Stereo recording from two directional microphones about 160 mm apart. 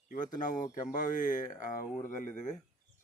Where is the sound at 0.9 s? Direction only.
55° left (ahead or behind).